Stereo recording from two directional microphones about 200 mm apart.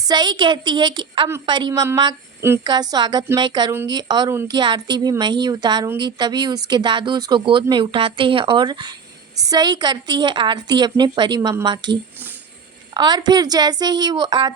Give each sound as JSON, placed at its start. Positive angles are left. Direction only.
{"t": 0.0, "sound": "speech", "side_deg": -20}